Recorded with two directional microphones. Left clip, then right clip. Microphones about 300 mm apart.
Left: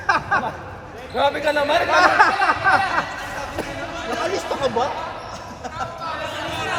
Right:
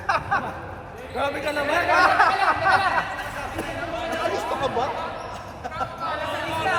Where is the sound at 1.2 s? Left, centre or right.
Left.